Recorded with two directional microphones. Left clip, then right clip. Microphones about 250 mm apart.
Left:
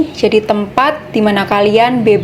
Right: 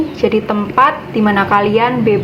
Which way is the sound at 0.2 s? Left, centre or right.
Left.